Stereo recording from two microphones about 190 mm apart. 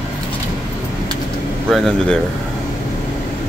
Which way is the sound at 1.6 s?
Centre (ahead or behind).